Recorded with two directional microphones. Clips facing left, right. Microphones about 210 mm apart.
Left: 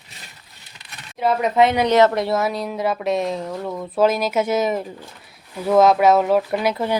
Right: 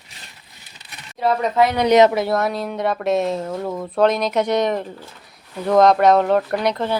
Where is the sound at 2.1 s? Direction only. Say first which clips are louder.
Right 1 dB; centre (ahead or behind).